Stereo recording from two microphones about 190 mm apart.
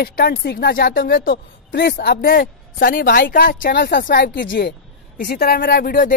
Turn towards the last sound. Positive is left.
turn(degrees=50)  # may be behind; listen again after turning